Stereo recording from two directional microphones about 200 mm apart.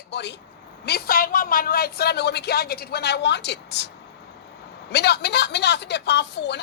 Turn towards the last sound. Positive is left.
turn(degrees=60)  # may be behind; listen again after turning